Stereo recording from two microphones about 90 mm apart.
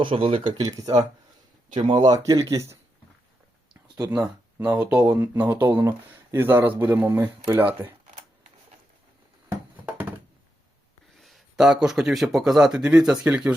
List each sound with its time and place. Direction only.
0.0 s speech: 85° right
0.5 s speech: 45° right (ahead or behind)
1.7 s speech: 60° right (ahead or behind)
2.1 s speech: 45° right (ahead or behind)
4.5 s speech: 20° right (ahead or behind)
9.7 s a sound: 20° right (ahead or behind)
11.2 s speech: centre (ahead or behind)